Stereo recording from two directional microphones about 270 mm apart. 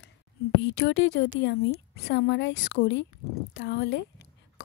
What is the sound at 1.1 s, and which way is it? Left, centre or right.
Speech, left.